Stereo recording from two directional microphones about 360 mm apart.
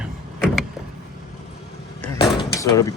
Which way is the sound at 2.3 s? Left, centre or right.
Centre.